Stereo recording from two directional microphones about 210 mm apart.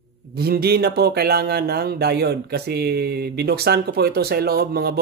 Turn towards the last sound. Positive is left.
turn(degrees=-50)  # may be behind; listen again after turning